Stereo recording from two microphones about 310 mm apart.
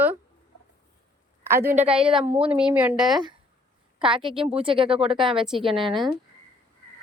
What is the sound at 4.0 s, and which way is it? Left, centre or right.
Speech, centre.